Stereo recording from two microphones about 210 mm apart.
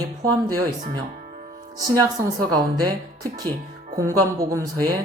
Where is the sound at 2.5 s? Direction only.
20° right (ahead or behind).